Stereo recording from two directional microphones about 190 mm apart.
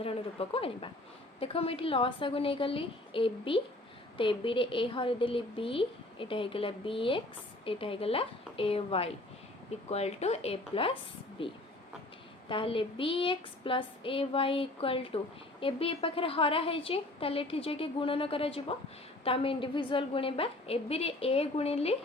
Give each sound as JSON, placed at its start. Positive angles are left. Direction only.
{"t": 0.0, "sound": "a woman's voice", "side_deg": 30}